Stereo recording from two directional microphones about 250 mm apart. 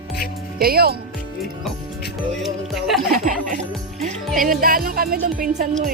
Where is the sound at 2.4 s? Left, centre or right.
Centre.